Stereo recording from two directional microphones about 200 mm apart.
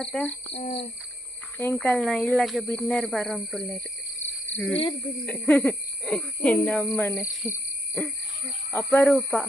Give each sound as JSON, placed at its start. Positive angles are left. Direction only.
{"t": 0.0, "sound": "speech", "side_deg": 5}
{"t": 0.5, "sound": "speech", "side_deg": 30}
{"t": 1.5, "sound": "speech", "side_deg": 10}
{"t": 4.8, "sound": "speech", "side_deg": 25}
{"t": 5.2, "sound": "speech", "side_deg": 5}
{"t": 7.4, "sound": "owl", "side_deg": 10}
{"t": 8.7, "sound": "speech", "side_deg": 10}